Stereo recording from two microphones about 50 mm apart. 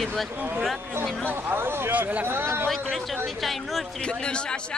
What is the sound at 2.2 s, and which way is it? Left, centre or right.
Speech, right.